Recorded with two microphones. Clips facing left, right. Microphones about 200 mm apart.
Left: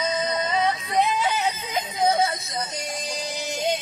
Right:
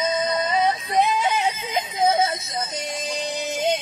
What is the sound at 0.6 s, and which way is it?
Yodeling, 30° right (ahead or behind).